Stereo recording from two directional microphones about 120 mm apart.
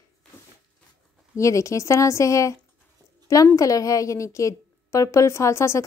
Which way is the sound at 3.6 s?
30° left (ahead or behind).